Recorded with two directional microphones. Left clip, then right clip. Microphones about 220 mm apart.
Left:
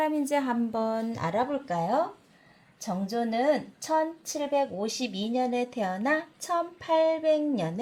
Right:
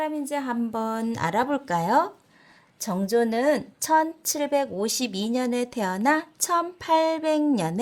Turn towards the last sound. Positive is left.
turn(degrees=-35)  # may be behind; listen again after turning